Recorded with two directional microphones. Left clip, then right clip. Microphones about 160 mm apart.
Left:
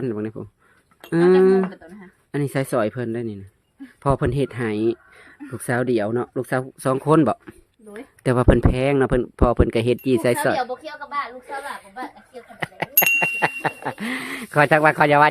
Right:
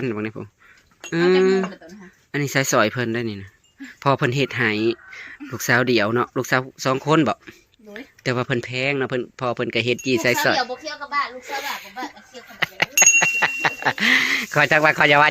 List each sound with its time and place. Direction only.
0.0 s speech: 20° left (ahead or behind)
1.1 s speech: 35° left (ahead or behind)
2.3 s speech: 25° left (ahead or behind)
2.7 s speech: 10° left (ahead or behind)
4.0 s speech: 20° left (ahead or behind)
5.5 s speech: 15° left (ahead or behind)
6.7 s speech: 35° left (ahead or behind)
10.5 s speech: centre (ahead or behind)
11.4 s speech: 15° left (ahead or behind)
12.5 s bicycle bell: 15° left (ahead or behind)
13.2 s a sound: 15° left (ahead or behind)
13.7 s speech: 10° left (ahead or behind); by 15.3 s 25° left (ahead or behind)